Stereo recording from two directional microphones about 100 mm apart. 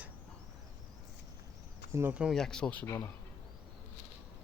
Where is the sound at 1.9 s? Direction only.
25° right (ahead or behind).